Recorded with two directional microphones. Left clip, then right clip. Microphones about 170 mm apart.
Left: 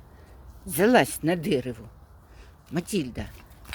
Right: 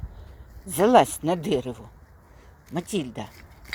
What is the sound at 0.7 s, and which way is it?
Speech, 20° left (ahead or behind).